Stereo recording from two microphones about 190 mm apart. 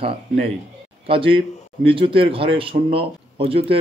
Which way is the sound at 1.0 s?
30° right (ahead or behind).